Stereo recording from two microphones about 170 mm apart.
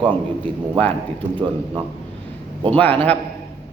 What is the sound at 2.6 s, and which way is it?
Speech, 10° left (ahead or behind).